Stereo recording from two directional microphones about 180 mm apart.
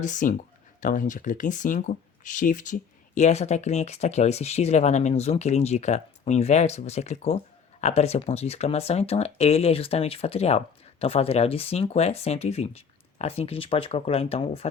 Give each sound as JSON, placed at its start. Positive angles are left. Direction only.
{"t": 0.0, "sound": "speech", "side_deg": 45}